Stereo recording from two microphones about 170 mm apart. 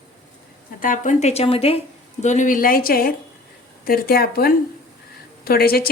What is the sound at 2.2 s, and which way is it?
A woman's voice, 45° left (ahead or behind).